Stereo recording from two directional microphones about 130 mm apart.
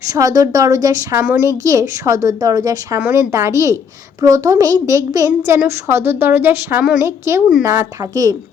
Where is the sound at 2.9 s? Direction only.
15° right (ahead or behind).